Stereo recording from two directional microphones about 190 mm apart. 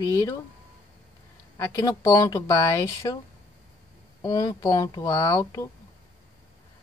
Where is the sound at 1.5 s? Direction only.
15° left (ahead or behind).